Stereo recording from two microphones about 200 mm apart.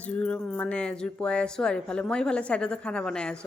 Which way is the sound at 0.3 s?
5° left (ahead or behind).